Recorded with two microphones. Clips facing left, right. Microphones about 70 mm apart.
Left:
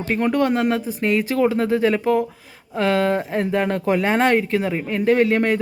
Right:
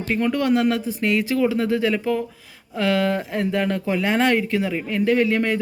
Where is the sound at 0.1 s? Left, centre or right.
Left.